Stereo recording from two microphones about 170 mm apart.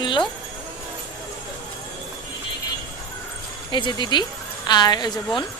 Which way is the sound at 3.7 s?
25° left (ahead or behind).